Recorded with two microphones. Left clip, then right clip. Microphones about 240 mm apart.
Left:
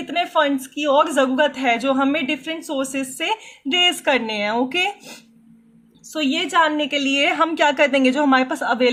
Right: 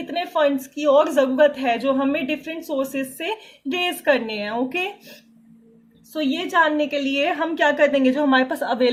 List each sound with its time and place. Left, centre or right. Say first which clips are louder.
0.3 s a woman's voice: right 1 dB; centre
6.2 s a woman's voice: left 1 dB; centre